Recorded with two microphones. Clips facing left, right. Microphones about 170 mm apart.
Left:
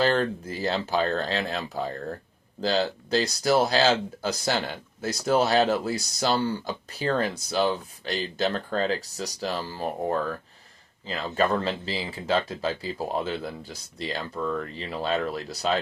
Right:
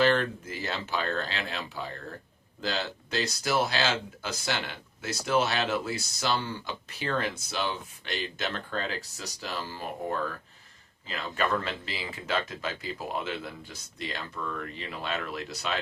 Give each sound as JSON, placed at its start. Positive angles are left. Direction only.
{"t": 0.0, "sound": "speech", "side_deg": 35}